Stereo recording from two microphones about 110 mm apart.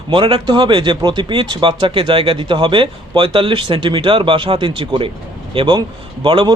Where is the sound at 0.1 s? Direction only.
50° right (ahead or behind).